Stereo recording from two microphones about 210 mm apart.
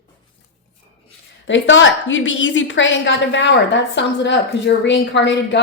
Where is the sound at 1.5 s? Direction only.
60° left (ahead or behind).